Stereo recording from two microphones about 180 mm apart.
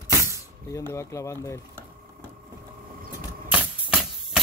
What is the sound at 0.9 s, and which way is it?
Speech, 15° left (ahead or behind).